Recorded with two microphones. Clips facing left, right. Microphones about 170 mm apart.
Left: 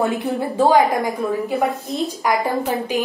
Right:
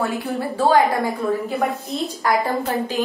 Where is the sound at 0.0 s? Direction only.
20° left (ahead or behind).